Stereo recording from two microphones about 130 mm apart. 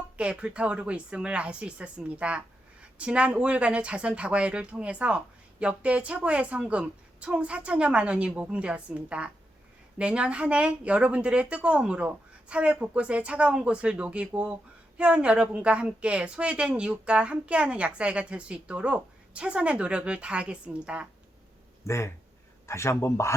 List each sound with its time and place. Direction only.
0.2 s a woman's voice: 10° right (ahead or behind)
21.8 s speech: 20° left (ahead or behind)